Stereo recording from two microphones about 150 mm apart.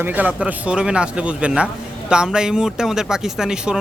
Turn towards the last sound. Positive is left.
turn(degrees=-5)  # may be behind; listen again after turning